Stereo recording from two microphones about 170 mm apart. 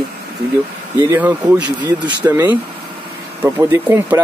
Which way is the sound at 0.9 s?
10° right (ahead or behind).